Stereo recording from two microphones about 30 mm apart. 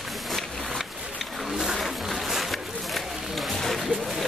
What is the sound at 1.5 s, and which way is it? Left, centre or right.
Vehicle, centre.